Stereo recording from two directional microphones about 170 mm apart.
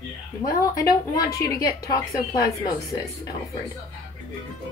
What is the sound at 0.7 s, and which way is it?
A woman's voice, 20° left (ahead or behind).